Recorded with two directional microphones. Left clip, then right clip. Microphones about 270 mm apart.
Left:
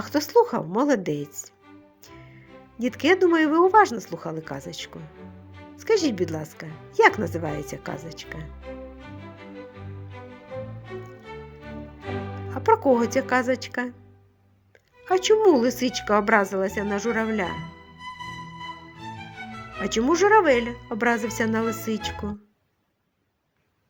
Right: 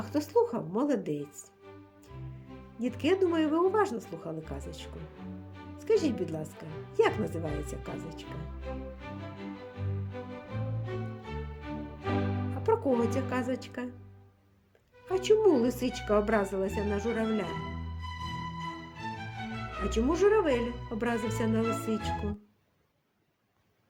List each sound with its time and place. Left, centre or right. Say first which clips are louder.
0.0 s a woman's voice: left 8 dB; left
2.8 s a woman's voice: left 8 dB; left
12.6 s a woman's voice: left 8 dB; left
15.0 s a woman's voice: left 6 dB; left
19.9 s a woman's voice: left 7 dB; left